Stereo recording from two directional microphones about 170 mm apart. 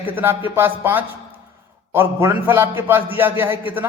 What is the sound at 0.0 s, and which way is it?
A man's voice, 10° right (ahead or behind).